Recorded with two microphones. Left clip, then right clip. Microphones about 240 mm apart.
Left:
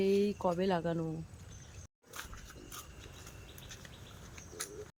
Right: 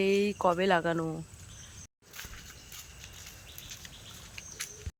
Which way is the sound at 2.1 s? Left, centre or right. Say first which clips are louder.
Right 1 dB; left.